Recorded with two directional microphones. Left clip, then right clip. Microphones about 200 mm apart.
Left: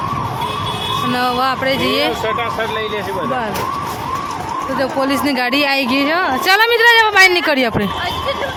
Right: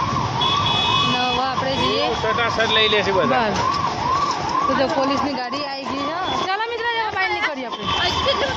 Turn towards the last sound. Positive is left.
turn(degrees=60)  # may be behind; listen again after turning